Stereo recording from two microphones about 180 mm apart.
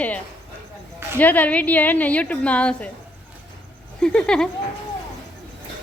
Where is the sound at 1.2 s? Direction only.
10° left (ahead or behind).